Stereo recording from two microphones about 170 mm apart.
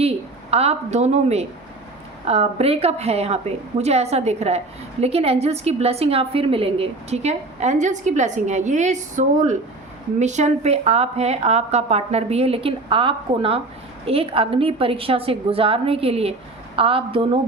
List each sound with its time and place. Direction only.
0.5 s a woman's voice: 40° right (ahead or behind)